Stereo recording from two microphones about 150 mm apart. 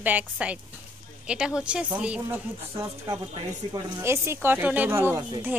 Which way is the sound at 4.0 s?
15° right (ahead or behind).